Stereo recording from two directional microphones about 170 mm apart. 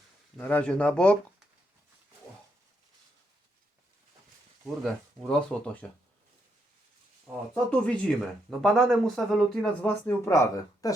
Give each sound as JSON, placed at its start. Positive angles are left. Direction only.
{"t": 0.3, "sound": "speech", "side_deg": 10}
{"t": 4.6, "sound": "speech", "side_deg": 0}
{"t": 7.5, "sound": "speech", "side_deg": 5}
{"t": 10.1, "sound": "speech", "side_deg": 15}